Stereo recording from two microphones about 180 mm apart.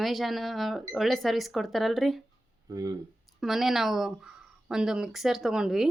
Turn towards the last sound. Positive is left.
turn(degrees=0)  # may be behind; listen again after turning